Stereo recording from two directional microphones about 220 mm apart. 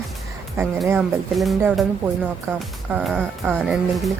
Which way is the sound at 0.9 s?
5° right (ahead or behind).